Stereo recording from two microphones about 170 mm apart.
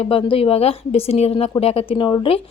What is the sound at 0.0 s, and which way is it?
A woman's voice, 30° left (ahead or behind).